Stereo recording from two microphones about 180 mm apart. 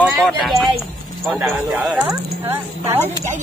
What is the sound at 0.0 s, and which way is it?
A woman's voice, centre (ahead or behind).